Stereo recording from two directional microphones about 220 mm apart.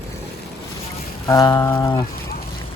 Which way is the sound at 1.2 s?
15° left (ahead or behind).